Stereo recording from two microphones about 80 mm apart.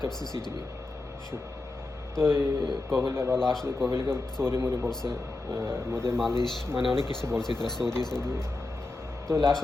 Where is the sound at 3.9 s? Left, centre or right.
Right.